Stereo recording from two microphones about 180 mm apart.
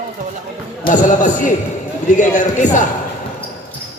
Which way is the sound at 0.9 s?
45° left (ahead or behind).